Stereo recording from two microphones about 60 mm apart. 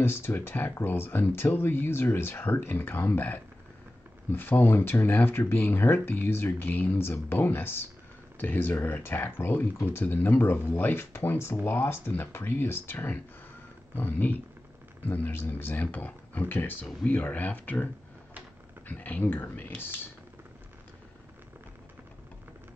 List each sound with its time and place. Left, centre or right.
0.0 s speech: left
11.1 s speech: left
11.5 s speech: left
17.0 s speech: left
18.9 s speech: left